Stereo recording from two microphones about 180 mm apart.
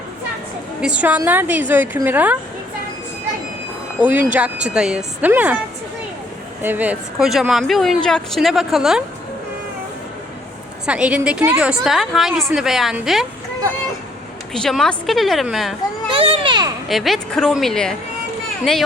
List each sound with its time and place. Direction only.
0.8 s a woman's voice: 5° right (ahead or behind)
4.0 s a woman's voice: 10° right (ahead or behind)
6.6 s speech: 10° right (ahead or behind)
10.8 s speech: 5° right (ahead or behind)
14.5 s speech: centre (ahead or behind)
16.0 s a child's voice: 30° right (ahead or behind)
16.9 s speech: centre (ahead or behind)